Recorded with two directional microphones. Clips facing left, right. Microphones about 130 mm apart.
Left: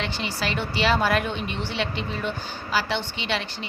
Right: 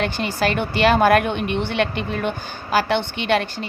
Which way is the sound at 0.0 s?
50° right (ahead or behind).